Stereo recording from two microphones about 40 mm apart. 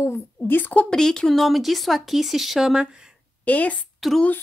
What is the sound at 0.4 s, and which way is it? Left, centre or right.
Speech, left.